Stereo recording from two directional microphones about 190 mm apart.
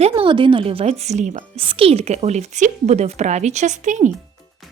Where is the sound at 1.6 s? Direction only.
30° right (ahead or behind).